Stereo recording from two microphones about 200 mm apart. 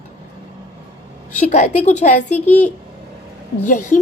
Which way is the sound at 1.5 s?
35° left (ahead or behind).